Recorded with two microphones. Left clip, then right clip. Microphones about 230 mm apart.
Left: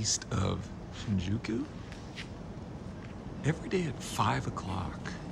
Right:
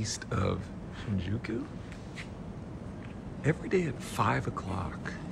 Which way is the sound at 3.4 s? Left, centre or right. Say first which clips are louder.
Right 4 dB; centre.